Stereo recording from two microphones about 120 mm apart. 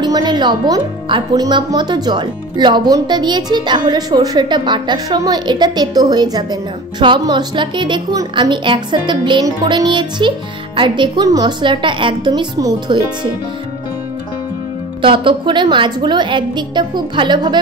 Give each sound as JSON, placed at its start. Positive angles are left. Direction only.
{"t": 0.0, "sound": "speech", "side_deg": -35}
{"t": 15.0, "sound": "speech", "side_deg": -45}